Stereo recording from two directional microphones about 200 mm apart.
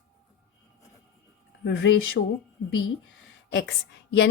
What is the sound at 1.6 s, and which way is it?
Speech, 65° left (ahead or behind).